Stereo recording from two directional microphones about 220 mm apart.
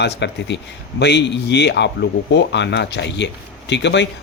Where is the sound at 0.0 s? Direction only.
50° left (ahead or behind).